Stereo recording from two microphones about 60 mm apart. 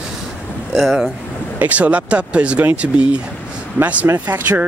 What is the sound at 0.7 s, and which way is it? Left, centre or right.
Speech, centre.